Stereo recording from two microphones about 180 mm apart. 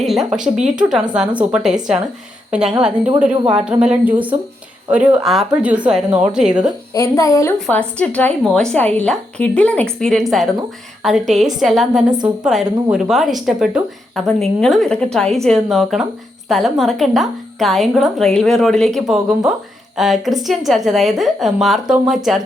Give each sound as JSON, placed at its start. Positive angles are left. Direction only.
{"t": 0.0, "sound": "a woman's voice", "side_deg": 0}
{"t": 6.9, "sound": "a woman's voice", "side_deg": 20}